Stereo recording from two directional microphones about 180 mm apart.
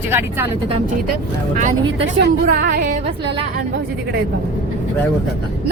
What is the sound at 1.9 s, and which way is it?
A woman's voice, 65° right (ahead or behind).